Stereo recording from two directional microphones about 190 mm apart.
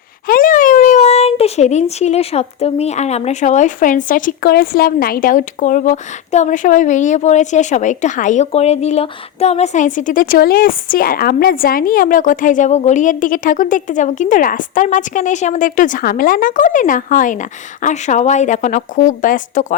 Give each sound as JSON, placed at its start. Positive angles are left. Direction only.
{"t": 0.3, "sound": "a child's voice", "side_deg": 45}